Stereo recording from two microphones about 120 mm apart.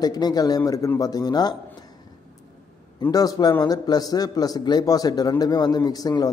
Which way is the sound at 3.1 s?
30° left (ahead or behind).